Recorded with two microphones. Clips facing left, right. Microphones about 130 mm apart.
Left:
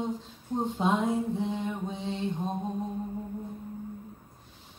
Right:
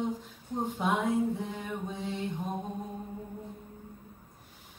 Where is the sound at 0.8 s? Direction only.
25° left (ahead or behind).